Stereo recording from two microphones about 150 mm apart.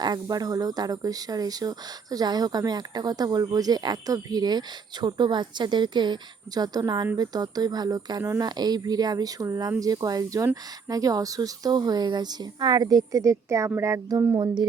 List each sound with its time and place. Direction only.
0.0 s speech: 25° right (ahead or behind)
14.3 s speech: 30° right (ahead or behind)